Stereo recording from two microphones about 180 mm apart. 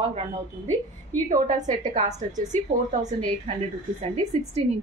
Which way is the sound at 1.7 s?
40° right (ahead or behind).